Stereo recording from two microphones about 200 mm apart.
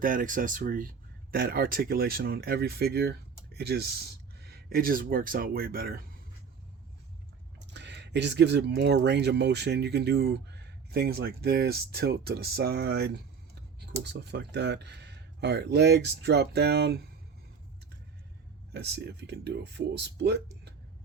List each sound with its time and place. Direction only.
0.0 s speech: 45° right (ahead or behind)
7.7 s speech: 60° right (ahead or behind)
18.7 s speech: 55° right (ahead or behind)